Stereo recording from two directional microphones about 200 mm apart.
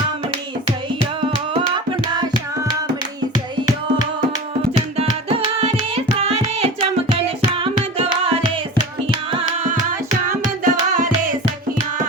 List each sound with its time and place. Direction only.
5.0 s music: 30° right (ahead or behind)
10.2 s music: 40° right (ahead or behind)